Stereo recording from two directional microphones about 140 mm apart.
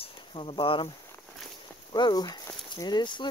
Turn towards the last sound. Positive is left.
turn(degrees=35)  # may be behind; listen again after turning